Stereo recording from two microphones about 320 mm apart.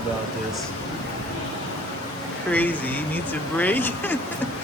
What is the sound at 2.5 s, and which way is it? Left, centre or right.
Speech, centre.